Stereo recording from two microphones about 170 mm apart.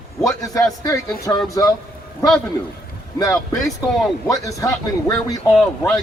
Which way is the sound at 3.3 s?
Centre (ahead or behind).